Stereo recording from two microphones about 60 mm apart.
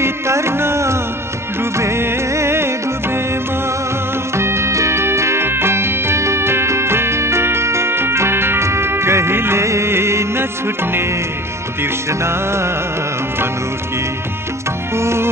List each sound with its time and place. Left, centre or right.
0.0 s music: right
4.4 s music: right
15.0 s music: right